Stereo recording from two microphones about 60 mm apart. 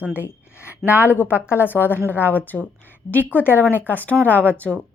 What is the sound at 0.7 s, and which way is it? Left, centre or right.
Speech, right.